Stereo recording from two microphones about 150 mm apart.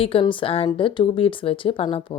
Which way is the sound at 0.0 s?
40° left (ahead or behind).